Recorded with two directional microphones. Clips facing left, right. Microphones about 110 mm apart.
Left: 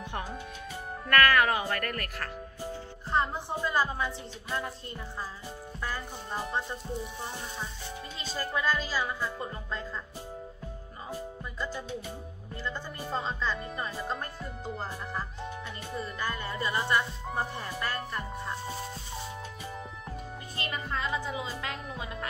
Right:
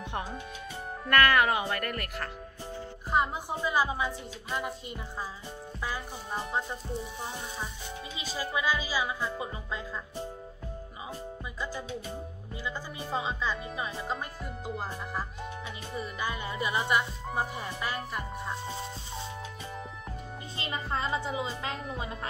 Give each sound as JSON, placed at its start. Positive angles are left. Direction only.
{"t": 1.1, "sound": "a woman's voice", "side_deg": -20}
{"t": 12.6, "sound": "speech", "side_deg": -5}
{"t": 20.5, "sound": "a woman's voice", "side_deg": -25}